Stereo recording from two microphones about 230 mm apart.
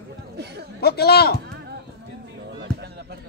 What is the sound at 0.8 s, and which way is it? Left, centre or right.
Speech, left.